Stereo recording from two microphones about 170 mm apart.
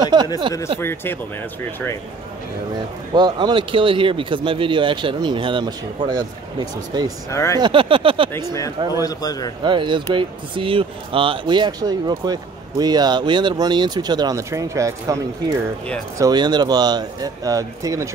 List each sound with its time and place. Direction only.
0.0 s speech: 25° right (ahead or behind)
0.7 s speech: 15° left (ahead or behind)
3.2 s speech: 25° right (ahead or behind)
7.2 s speech: 15° left (ahead or behind)
7.6 s a sound: 30° right (ahead or behind)
8.3 s a man's voice: 15° left (ahead or behind)
9.6 s speech: 30° right (ahead or behind)